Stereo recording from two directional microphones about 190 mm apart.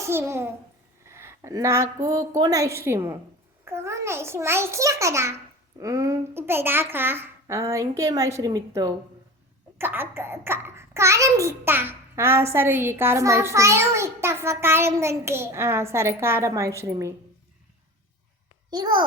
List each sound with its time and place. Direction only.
0.0 s a child's voice: 15° right (ahead or behind)
18.7 s a child's voice: 20° right (ahead or behind)